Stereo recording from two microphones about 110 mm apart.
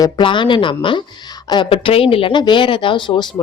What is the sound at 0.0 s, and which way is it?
Speech, 45° left (ahead or behind).